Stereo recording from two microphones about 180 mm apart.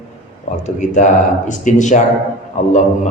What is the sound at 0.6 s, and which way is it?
Speech, 45° left (ahead or behind).